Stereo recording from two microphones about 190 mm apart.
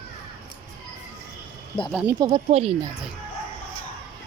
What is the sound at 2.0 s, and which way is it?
Speech, 20° right (ahead or behind).